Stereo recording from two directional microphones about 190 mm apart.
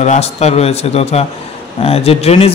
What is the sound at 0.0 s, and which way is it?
A man's voice, 35° left (ahead or behind).